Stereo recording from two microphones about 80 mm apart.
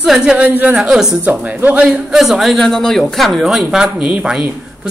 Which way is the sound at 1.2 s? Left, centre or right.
Centre.